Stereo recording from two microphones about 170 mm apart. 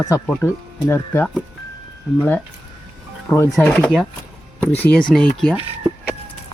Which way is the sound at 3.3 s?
15° left (ahead or behind).